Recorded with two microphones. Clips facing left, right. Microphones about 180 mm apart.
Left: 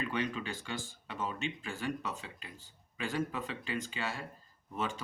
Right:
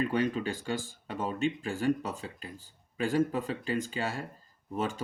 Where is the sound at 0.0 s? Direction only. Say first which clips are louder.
Right 7 dB; 40° right (ahead or behind).